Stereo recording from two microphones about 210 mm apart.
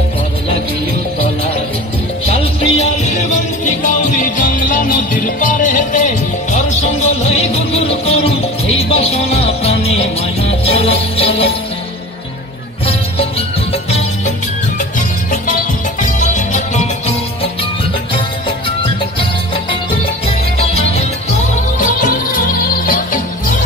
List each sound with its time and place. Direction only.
2.2 s music: 30° left (ahead or behind)
8.0 s music: 30° left (ahead or behind)
13.8 s music: 30° left (ahead or behind)
20.5 s music: 30° left (ahead or behind)